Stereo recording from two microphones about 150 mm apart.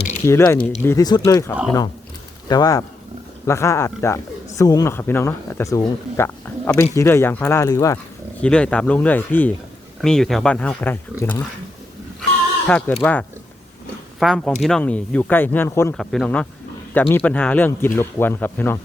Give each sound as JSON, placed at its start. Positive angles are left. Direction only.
{"t": 0.3, "sound": "speech", "side_deg": 15}
{"t": 8.4, "sound": "speech", "side_deg": 5}
{"t": 12.6, "sound": "speech", "side_deg": 10}
{"t": 16.0, "sound": "speech", "side_deg": 5}